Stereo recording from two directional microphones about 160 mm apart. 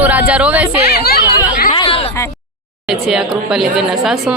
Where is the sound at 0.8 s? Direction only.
75° left (ahead or behind).